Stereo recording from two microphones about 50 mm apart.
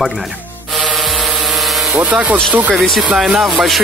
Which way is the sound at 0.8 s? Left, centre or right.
Centre.